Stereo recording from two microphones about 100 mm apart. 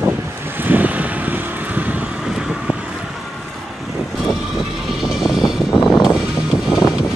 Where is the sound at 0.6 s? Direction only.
20° right (ahead or behind).